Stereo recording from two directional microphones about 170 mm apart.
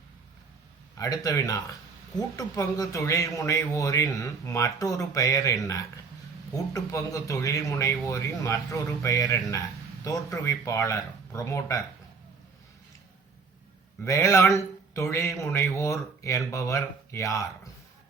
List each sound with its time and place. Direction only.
0.9 s speech: 20° left (ahead or behind)
14.0 s speech: 15° left (ahead or behind)